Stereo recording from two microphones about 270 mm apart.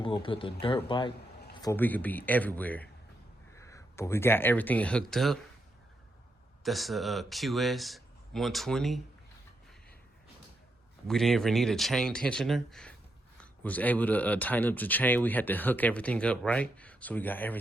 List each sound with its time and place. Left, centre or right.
0.0 s speech: centre
1.6 s speech: centre
6.6 s speech: centre
11.1 s speech: centre